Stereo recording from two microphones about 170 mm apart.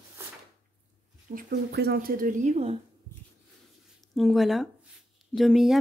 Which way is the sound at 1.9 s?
55° right (ahead or behind).